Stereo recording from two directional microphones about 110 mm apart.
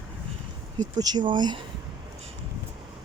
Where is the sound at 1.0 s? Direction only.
40° right (ahead or behind).